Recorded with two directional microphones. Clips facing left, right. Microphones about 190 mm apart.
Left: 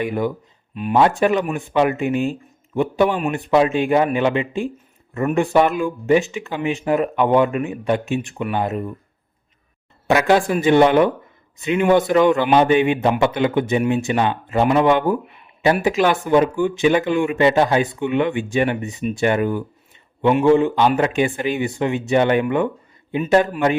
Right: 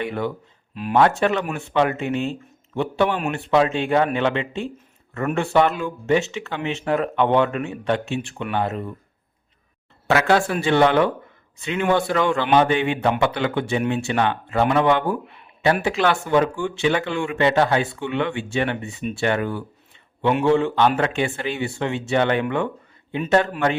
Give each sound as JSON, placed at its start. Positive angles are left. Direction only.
{"t": 0.0, "sound": "speech", "side_deg": 10}
{"t": 0.7, "sound": "speech", "side_deg": 0}
{"t": 0.9, "sound": "speech", "side_deg": 15}
{"t": 10.1, "sound": "speech", "side_deg": 15}